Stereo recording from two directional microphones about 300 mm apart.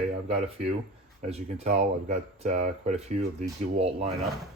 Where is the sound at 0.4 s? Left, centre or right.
Centre.